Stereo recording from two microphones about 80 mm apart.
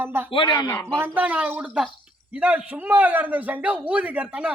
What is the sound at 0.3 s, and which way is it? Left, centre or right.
Speech, left.